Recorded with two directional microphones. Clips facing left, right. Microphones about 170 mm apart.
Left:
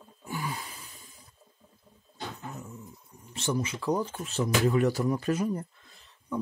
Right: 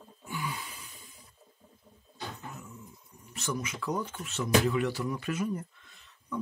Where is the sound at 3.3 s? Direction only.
30° left (ahead or behind).